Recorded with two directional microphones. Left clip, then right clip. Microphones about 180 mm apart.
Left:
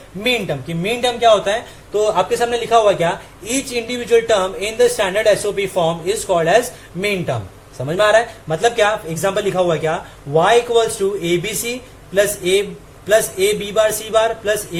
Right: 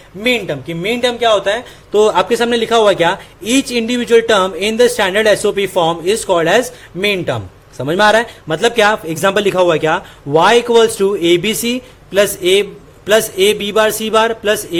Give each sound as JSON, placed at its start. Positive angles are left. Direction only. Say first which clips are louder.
{"t": 0.2, "sound": "speech", "louder": "right 3 dB", "side_deg": -35}